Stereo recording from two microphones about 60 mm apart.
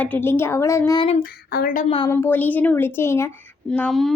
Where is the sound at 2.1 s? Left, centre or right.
Left.